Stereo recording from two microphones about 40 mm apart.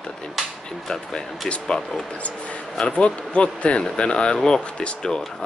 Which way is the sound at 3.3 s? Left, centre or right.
Left.